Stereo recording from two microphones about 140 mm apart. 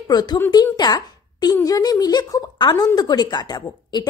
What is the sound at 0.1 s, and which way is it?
Speech, 30° left (ahead or behind).